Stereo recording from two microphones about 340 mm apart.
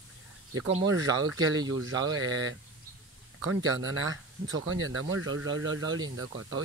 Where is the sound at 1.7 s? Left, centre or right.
Right.